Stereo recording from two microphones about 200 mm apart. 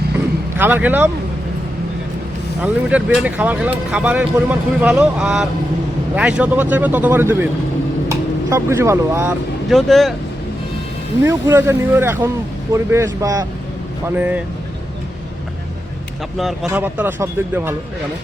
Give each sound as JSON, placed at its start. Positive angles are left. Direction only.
{"t": 0.5, "sound": "speech", "side_deg": -10}
{"t": 2.6, "sound": "speech", "side_deg": -5}
{"t": 9.6, "sound": "speech", "side_deg": 0}
{"t": 11.2, "sound": "speech", "side_deg": -10}
{"t": 16.6, "sound": "speech", "side_deg": -10}